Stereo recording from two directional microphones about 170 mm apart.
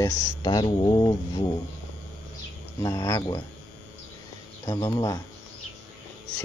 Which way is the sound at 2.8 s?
20° left (ahead or behind).